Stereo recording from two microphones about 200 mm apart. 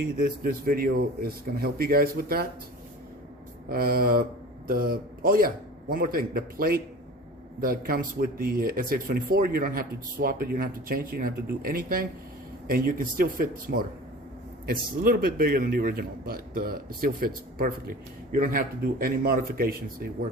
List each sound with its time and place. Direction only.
0.2 s a man's voice: 45° right (ahead or behind)
3.7 s a man's voice: 45° right (ahead or behind)